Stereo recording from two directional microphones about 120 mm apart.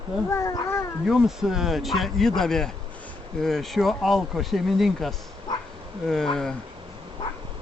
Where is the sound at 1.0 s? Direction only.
5° right (ahead or behind).